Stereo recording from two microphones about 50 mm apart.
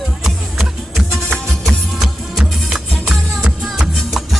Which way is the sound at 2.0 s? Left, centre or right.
Centre.